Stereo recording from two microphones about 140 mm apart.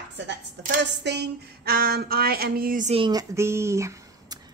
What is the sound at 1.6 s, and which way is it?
Music, 90° right.